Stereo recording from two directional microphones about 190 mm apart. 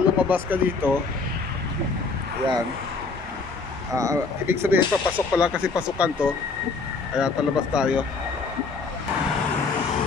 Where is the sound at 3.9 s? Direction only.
15° right (ahead or behind).